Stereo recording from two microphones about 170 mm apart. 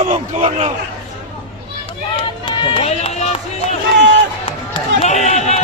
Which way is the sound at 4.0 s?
90° right.